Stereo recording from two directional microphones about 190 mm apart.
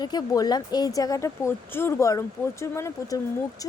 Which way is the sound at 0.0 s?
20° left (ahead or behind).